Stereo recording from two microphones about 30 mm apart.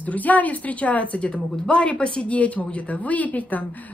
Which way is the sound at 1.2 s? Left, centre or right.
Left.